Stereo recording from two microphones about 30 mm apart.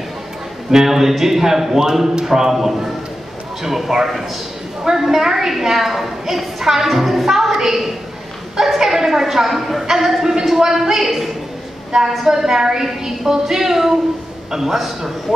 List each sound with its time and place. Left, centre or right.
0.7 s a woman's voice: centre